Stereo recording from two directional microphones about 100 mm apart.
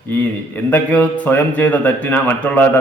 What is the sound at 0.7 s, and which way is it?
Speech, 15° left (ahead or behind).